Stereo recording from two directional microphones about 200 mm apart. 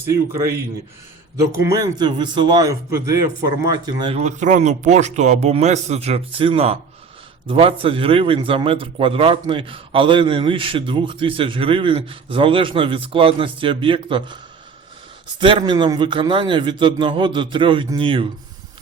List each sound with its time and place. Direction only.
0.0 s a man's voice: 15° right (ahead or behind)
1.6 s a man's voice: 20° right (ahead or behind)
15.4 s a man's voice: 25° right (ahead or behind)